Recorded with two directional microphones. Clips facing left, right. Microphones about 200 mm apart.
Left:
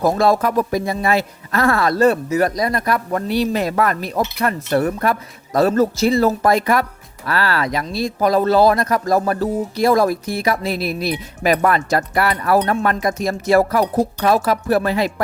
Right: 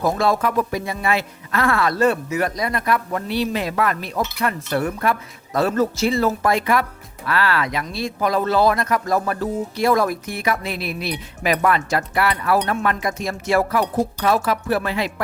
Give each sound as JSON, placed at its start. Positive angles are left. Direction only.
{"t": 0.0, "sound": "speech", "side_deg": 40}